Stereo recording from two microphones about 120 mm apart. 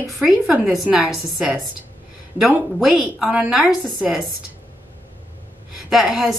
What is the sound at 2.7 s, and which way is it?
A woman's voice, 5° right (ahead or behind).